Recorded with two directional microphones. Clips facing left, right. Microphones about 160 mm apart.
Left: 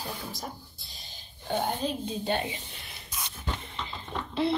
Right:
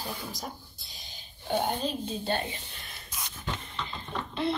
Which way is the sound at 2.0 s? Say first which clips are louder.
Left 1 dB; 15° left (ahead or behind).